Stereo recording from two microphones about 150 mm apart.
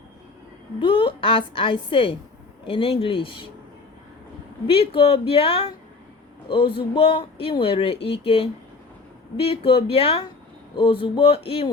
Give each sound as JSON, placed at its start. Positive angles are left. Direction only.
{"t": 0.8, "sound": "a woman's voice", "side_deg": 35}
{"t": 4.6, "sound": "speech", "side_deg": 40}